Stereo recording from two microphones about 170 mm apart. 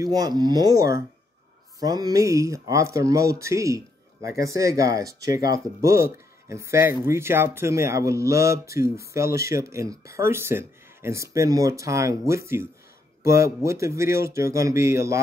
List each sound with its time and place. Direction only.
0.0 s speech: 25° right (ahead or behind)